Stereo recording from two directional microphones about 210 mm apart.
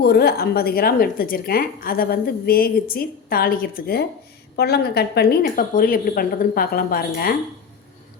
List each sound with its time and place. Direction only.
0.0 s a woman's voice: 50° left (ahead or behind)